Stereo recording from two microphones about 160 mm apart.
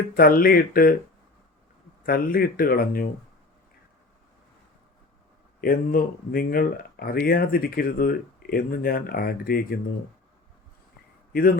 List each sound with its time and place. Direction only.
0.1 s speech: 65° left (ahead or behind)
2.0 s speech: 65° left (ahead or behind)
5.5 s speech: 70° left (ahead or behind)
11.3 s speech: 65° left (ahead or behind)